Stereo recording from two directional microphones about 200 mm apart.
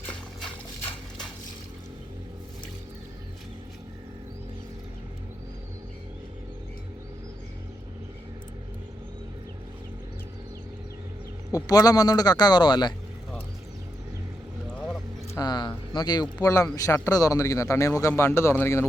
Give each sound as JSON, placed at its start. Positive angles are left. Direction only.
{"t": 11.5, "sound": "speech", "side_deg": 20}
{"t": 15.4, "sound": "a sound", "side_deg": 20}
{"t": 16.0, "sound": "speech", "side_deg": 20}